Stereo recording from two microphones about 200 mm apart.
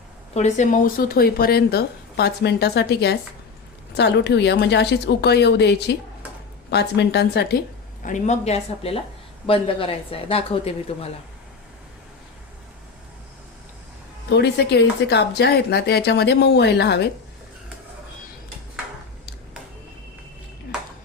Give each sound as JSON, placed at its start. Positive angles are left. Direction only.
{"t": 0.3, "sound": "speech", "side_deg": 35}
{"t": 8.0, "sound": "a woman's voice", "side_deg": 35}
{"t": 14.3, "sound": "speech", "side_deg": 55}